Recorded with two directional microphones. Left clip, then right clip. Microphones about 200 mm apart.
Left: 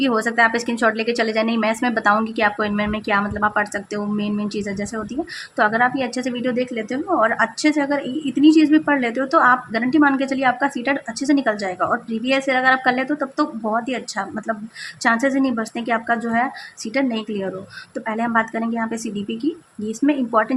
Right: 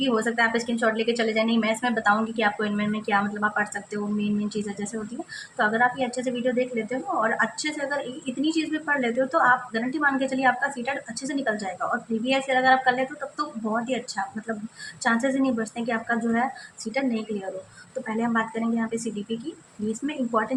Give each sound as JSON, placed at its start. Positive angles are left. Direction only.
{"t": 0.0, "sound": "a woman's voice", "side_deg": 45}
{"t": 15.0, "sound": "a woman's voice", "side_deg": 50}
{"t": 19.9, "sound": "a woman's voice", "side_deg": 45}